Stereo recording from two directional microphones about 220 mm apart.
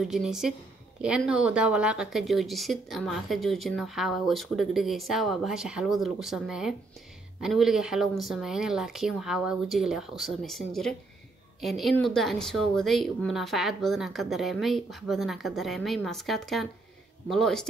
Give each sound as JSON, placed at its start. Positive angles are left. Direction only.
{"t": 0.0, "sound": "speech", "side_deg": 0}